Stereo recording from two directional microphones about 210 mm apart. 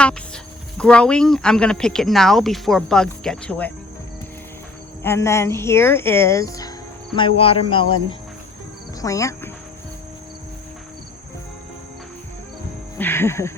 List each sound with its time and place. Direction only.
0.8 s speech: 5° left (ahead or behind)
5.0 s speech: 10° left (ahead or behind)
9.0 s speech: 15° left (ahead or behind)
13.0 s speech: 10° left (ahead or behind)